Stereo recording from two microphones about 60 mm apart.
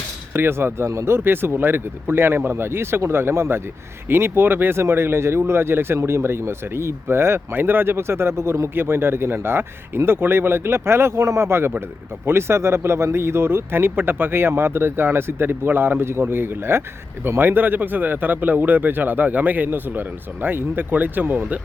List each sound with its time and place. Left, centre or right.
0.3 s a man's voice: right